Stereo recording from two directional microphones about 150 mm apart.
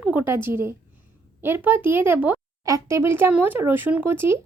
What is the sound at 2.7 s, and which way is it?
Speech, 20° right (ahead or behind).